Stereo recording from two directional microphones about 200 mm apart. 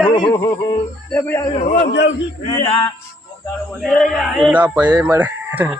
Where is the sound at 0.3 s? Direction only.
20° left (ahead or behind).